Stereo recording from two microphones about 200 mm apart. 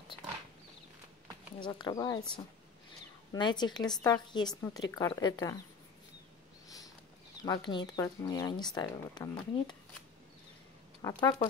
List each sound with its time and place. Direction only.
1.6 s speech: 20° left (ahead or behind)
3.3 s speech: 20° left (ahead or behind)
7.4 s speech: 25° left (ahead or behind)
11.0 s speech: 20° left (ahead or behind)